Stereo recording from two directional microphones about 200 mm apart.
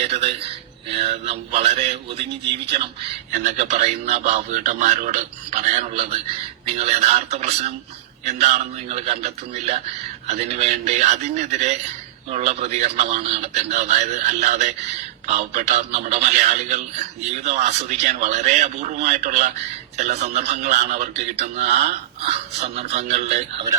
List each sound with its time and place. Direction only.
0.0 s speech: 30° right (ahead or behind)
3.3 s speech: 40° right (ahead or behind)